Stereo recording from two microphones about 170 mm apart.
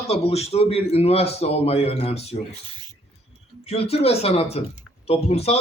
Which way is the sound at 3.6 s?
35° left (ahead or behind).